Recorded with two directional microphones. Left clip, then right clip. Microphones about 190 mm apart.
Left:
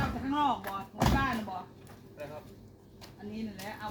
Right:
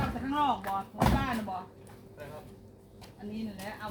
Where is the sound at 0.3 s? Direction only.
5° left (ahead or behind).